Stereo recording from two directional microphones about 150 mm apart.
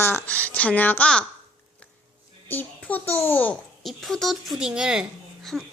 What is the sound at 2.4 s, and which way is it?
A woman's voice, 10° left (ahead or behind).